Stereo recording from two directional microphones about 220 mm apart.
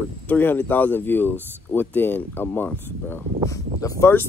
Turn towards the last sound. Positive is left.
turn(degrees=10)  # may be behind; listen again after turning